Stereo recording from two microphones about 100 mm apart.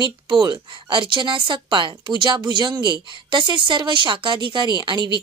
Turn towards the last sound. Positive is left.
turn(degrees=-50)  # may be behind; listen again after turning